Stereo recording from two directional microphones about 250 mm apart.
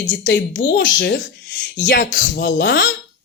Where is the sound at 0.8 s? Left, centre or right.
Left.